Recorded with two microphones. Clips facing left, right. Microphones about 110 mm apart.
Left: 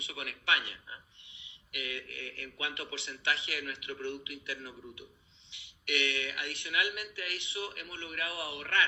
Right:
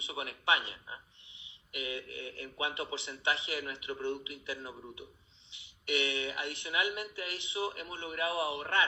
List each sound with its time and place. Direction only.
0.0 s a man's voice: 25° right (ahead or behind)